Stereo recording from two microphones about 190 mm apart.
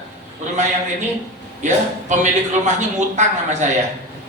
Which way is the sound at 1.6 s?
40° right (ahead or behind).